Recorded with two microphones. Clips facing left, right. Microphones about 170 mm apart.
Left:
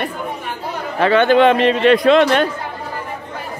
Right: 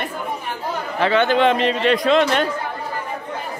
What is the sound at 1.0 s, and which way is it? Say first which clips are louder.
Speech: left 5 dB; 55° left (ahead or behind).